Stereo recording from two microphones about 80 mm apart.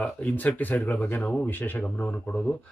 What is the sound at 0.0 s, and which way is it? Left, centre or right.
A man's voice, centre.